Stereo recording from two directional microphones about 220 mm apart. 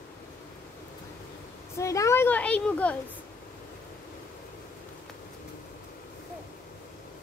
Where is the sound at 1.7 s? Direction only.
15° left (ahead or behind).